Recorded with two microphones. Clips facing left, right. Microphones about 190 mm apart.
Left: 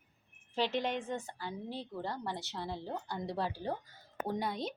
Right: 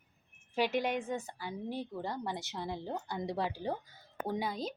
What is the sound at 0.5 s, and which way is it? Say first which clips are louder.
A woman's voice: right 2 dB; 10° right (ahead or behind).